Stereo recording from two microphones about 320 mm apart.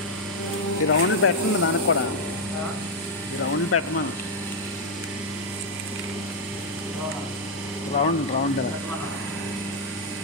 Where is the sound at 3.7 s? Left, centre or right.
Left.